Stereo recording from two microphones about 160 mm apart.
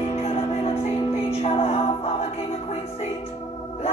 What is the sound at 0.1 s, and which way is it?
Music, 40° left (ahead or behind).